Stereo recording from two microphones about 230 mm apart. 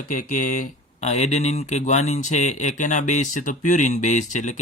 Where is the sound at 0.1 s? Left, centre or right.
Left.